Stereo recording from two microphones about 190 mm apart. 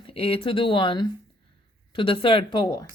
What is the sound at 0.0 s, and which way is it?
Speech, 30° left (ahead or behind).